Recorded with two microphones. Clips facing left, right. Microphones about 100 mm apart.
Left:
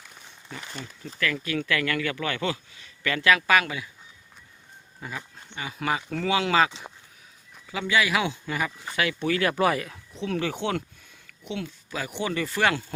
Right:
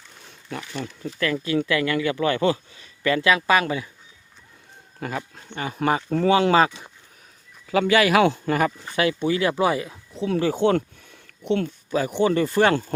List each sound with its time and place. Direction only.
1.0 s speech: 30° right (ahead or behind)
4.9 s speech: 65° right (ahead or behind); by 6.7 s 35° right (ahead or behind)
7.7 s speech: 60° right (ahead or behind)
9.2 s speech: 25° right (ahead or behind); by 10.8 s 40° right (ahead or behind)
11.1 s a sound: 55° right (ahead or behind)
12.1 s speech: 40° right (ahead or behind)